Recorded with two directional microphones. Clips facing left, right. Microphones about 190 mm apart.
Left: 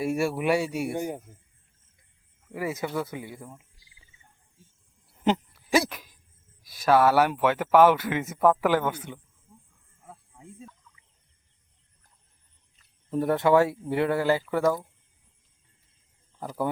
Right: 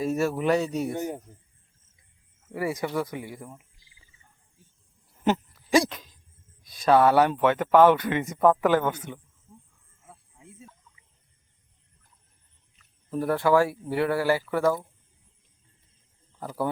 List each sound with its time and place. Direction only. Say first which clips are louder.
0.0 s speech: right 1 dB; 10° left (ahead or behind)
2.5 s speech: right 2 dB; 15° left (ahead or behind)
5.1 s a sound: even; 15° left (ahead or behind)
6.7 s speech: right 1 dB; 5° left (ahead or behind)
13.1 s speech: left 1 dB; 20° left (ahead or behind)